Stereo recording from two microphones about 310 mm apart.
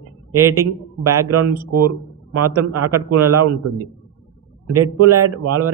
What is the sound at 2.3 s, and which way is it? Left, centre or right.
A man's voice, right.